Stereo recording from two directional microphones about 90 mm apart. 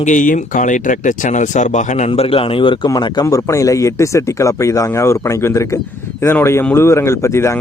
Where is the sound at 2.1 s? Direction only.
90° left.